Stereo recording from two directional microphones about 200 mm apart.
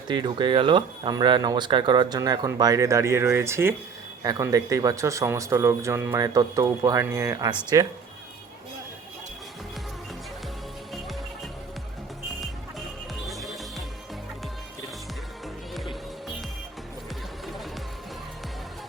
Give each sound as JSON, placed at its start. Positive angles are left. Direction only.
{"t": 0.1, "sound": "speech", "side_deg": -20}
{"t": 13.2, "sound": "music", "side_deg": 0}
{"t": 15.7, "sound": "music", "side_deg": 0}